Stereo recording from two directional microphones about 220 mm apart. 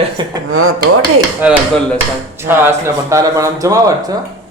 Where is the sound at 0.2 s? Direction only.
20° right (ahead or behind).